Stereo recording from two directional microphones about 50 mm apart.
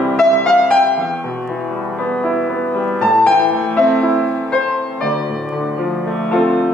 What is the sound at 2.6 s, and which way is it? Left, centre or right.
Music, left.